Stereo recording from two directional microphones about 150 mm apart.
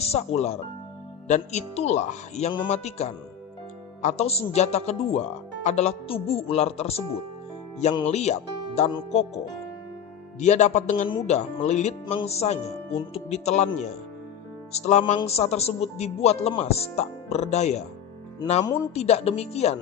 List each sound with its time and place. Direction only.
0.0 s speech: 45° left (ahead or behind)
10.4 s speech: 50° left (ahead or behind)
18.9 s speech: 45° left (ahead or behind)